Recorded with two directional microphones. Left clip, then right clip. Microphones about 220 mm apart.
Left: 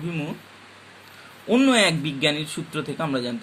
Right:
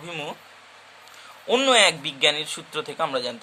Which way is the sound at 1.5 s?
20° right (ahead or behind).